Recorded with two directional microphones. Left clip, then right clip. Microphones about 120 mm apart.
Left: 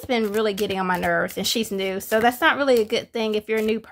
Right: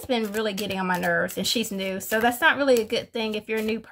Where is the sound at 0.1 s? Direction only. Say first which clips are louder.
Left 4 dB; 45° left (ahead or behind).